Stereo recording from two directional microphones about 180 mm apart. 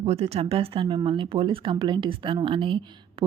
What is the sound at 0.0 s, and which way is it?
Speech, 35° right (ahead or behind).